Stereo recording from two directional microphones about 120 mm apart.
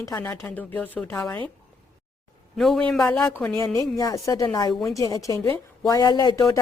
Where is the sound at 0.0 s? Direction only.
25° left (ahead or behind).